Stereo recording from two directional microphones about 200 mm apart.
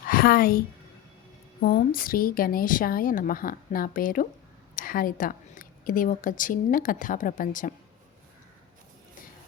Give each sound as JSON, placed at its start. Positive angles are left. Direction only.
{"t": 0.1, "sound": "a woman's voice", "side_deg": 50}
{"t": 1.6, "sound": "a woman's voice", "side_deg": 50}